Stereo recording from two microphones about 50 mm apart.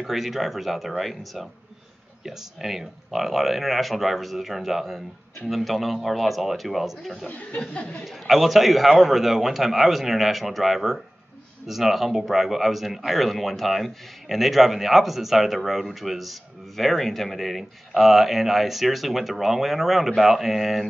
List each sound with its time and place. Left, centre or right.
0.0 s speech: centre
7.2 s speech: left
8.0 s speech: centre